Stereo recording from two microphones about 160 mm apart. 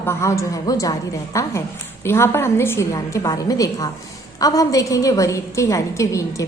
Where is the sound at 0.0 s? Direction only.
15° left (ahead or behind).